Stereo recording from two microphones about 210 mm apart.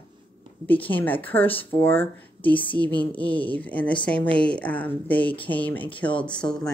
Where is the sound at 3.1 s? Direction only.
5° left (ahead or behind).